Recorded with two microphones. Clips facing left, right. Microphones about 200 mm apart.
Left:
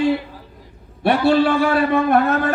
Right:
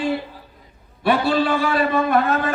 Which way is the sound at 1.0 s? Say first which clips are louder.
Left 3 dB; 65° left (ahead or behind).